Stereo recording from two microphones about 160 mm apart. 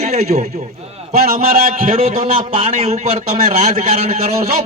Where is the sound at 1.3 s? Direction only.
70° right (ahead or behind).